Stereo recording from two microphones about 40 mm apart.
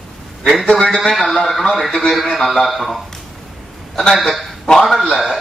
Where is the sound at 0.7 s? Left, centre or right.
Left.